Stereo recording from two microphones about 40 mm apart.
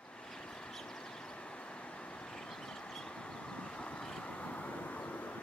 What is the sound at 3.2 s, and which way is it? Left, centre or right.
Vehicle, left.